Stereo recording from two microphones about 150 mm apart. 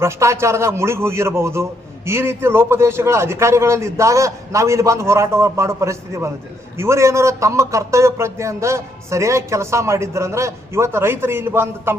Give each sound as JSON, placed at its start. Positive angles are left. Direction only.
{"t": 0.0, "sound": "a man's voice", "side_deg": -20}